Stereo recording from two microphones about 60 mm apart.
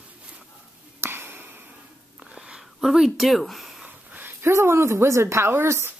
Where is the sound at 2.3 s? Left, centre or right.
Centre.